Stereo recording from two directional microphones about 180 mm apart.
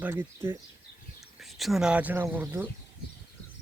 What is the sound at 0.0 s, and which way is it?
Speech, 10° right (ahead or behind).